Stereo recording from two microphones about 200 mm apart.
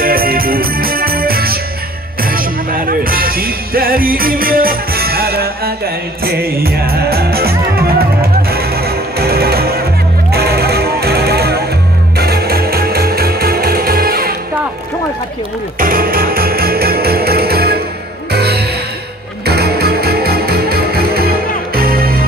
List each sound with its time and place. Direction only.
0.0 s music: 50° right (ahead or behind)
15.8 s music: 45° right (ahead or behind)